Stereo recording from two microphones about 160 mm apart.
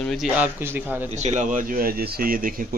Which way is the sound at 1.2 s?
55° right (ahead or behind).